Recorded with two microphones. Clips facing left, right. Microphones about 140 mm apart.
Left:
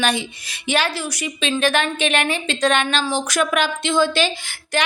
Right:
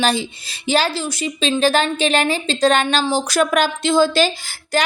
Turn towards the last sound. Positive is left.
turn(degrees=-35)  # may be behind; listen again after turning